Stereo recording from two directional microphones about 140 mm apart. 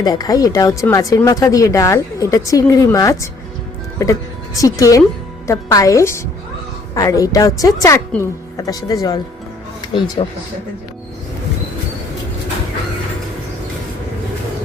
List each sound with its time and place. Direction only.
0.0 s speech: 30° left (ahead or behind)